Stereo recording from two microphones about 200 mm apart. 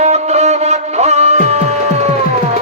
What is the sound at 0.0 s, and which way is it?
Music, 35° right (ahead or behind).